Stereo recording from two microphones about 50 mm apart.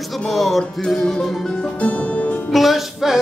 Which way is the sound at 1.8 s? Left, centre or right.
Left.